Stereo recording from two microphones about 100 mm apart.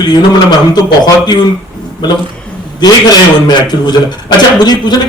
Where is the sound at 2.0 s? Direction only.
45° left (ahead or behind).